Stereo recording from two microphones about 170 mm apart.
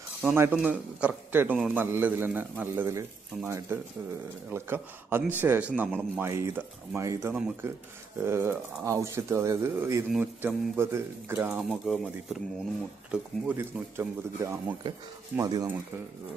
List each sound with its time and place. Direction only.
0.2 s a man's voice: 10° right (ahead or behind)